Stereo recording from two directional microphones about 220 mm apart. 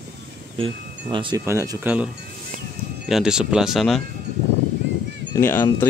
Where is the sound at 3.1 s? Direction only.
Centre (ahead or behind).